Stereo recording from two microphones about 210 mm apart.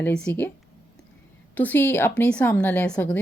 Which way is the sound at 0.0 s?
5° left (ahead or behind).